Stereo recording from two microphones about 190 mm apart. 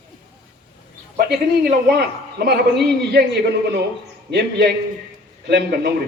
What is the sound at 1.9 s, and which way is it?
Speech, 55° right (ahead or behind).